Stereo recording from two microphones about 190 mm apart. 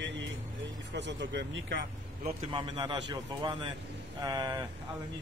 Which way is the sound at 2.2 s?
25° right (ahead or behind).